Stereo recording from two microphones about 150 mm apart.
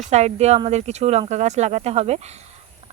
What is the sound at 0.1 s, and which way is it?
Speech, 50° right (ahead or behind).